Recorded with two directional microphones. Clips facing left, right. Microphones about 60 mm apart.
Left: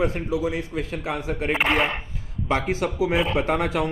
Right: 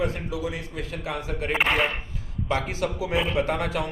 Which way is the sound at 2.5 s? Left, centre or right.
Left.